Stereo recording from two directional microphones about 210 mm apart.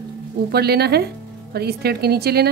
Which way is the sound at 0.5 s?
50° right (ahead or behind).